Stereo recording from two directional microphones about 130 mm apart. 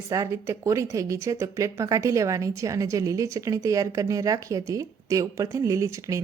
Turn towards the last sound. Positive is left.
turn(degrees=-25)  # may be behind; listen again after turning